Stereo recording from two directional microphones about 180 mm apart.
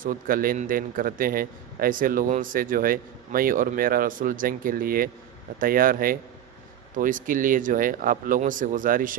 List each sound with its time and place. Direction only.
0.0 s a man's voice: 50° right (ahead or behind)